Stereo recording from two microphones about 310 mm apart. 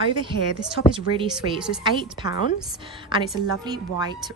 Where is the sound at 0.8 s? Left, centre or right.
Left.